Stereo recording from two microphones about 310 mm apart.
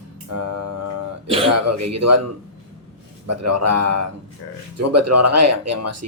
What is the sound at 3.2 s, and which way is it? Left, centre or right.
Speech, right.